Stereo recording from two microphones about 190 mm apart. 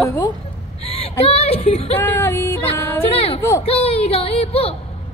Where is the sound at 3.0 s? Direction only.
30° left (ahead or behind).